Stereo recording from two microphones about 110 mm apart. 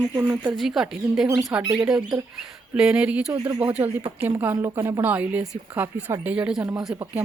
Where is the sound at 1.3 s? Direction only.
30° right (ahead or behind).